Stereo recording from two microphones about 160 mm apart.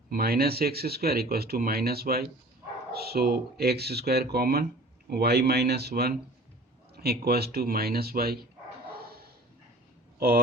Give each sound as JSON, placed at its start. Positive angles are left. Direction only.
{"t": 0.1, "sound": "speech", "side_deg": -70}
{"t": 5.0, "sound": "speech", "side_deg": -85}
{"t": 10.2, "sound": "speech", "side_deg": -70}